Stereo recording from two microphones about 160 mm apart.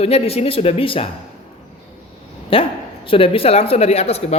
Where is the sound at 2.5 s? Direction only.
35° left (ahead or behind).